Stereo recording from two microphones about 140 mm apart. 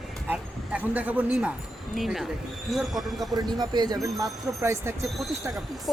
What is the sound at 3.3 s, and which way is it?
Speech, 30° right (ahead or behind).